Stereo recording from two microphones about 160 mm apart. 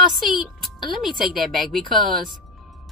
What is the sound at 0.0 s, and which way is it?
Speech, centre (ahead or behind).